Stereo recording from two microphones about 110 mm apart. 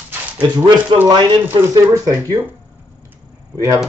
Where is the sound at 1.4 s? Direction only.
25° right (ahead or behind).